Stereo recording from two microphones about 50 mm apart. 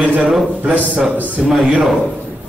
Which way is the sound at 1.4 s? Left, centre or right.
Centre.